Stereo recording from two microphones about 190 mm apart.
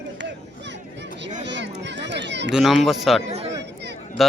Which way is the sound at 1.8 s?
65° right (ahead or behind).